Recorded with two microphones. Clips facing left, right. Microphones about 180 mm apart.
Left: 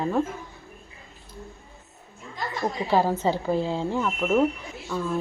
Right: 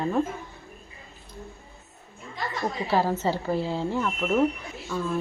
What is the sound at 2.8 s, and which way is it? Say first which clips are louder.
Speech: left 2 dB; 15° left (ahead or behind).